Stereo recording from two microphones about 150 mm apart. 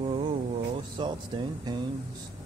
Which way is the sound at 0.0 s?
30° right (ahead or behind).